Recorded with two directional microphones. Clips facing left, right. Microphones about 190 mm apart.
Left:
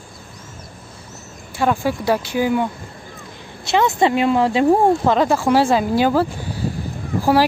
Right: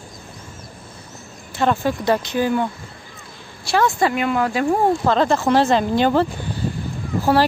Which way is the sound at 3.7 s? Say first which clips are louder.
Left 2 dB; 20° left (ahead or behind).